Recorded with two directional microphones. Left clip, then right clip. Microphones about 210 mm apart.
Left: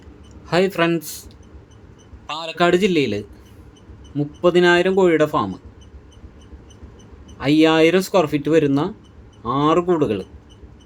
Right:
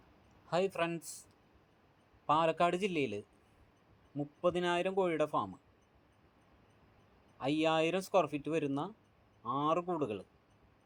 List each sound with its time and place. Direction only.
0.4 s speech: 20° right (ahead or behind)
2.3 s a man's voice: 5° left (ahead or behind)
2.6 s speech: 25° right (ahead or behind)
7.3 s speech: 25° right (ahead or behind)